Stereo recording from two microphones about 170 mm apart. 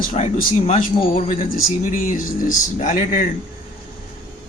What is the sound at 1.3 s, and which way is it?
A man's voice, 55° left (ahead or behind).